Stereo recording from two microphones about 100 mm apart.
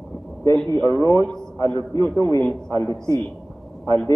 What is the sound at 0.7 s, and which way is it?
A man's voice, 30° left (ahead or behind).